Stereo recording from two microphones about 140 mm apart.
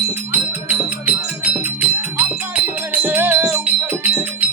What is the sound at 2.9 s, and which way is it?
Music, 10° right (ahead or behind).